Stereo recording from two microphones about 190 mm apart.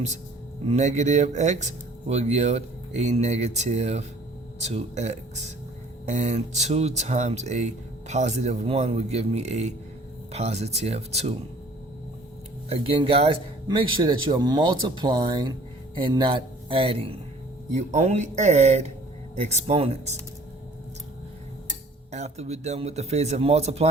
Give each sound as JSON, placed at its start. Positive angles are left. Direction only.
{"t": 0.7, "sound": "speech", "side_deg": -40}
{"t": 12.6, "sound": "speech", "side_deg": -30}
{"t": 22.1, "sound": "speech", "side_deg": -35}